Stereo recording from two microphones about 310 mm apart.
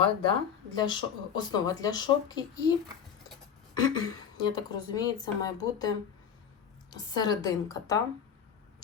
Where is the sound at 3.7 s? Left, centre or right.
Centre.